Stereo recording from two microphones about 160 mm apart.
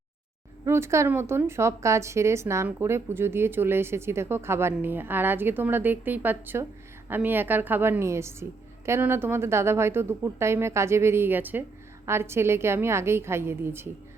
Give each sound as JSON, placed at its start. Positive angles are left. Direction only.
{"t": 0.6, "sound": "a woman's voice", "side_deg": -15}